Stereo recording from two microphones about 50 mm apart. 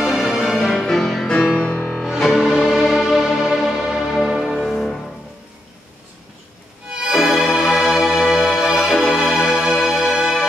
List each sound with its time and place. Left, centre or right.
0.0 s music: centre
2.3 s music: centre
4.7 s music: centre
6.9 s music: centre